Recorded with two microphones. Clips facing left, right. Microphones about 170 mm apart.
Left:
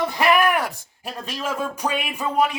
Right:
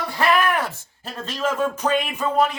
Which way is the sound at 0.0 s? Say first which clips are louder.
Left 2 dB; 15° left (ahead or behind).